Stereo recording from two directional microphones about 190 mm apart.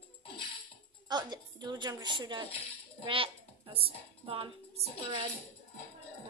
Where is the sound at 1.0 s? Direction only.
20° right (ahead or behind).